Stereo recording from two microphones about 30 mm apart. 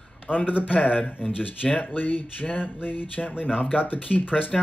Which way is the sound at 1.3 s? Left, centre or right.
Left.